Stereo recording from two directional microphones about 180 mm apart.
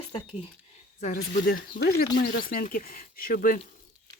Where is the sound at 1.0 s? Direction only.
45° left (ahead or behind).